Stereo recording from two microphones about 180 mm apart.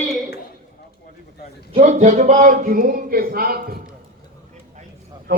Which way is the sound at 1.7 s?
40° right (ahead or behind).